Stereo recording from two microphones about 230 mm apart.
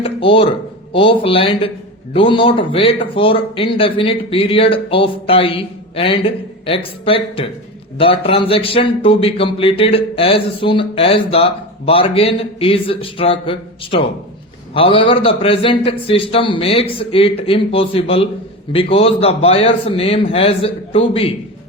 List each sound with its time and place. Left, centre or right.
0.0 s a man's voice: left